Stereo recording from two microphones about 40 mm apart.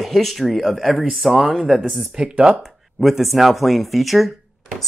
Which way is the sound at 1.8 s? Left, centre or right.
Right.